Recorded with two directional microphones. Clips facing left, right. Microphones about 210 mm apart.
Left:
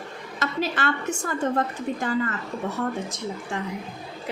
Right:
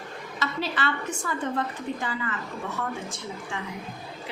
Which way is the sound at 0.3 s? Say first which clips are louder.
Left 3 dB; 45° left (ahead or behind).